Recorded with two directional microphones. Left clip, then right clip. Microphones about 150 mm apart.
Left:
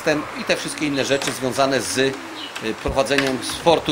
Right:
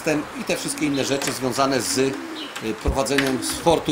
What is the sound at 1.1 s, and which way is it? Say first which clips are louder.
Speech: left 2 dB; 5° left (ahead or behind).